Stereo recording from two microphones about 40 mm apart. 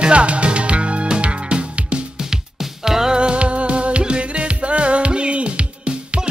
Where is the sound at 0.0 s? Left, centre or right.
Right.